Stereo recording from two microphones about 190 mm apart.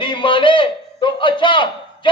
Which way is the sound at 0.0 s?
25° left (ahead or behind).